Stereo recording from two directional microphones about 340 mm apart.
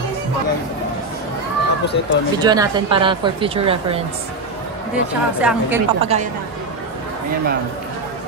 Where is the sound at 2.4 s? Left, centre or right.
Centre.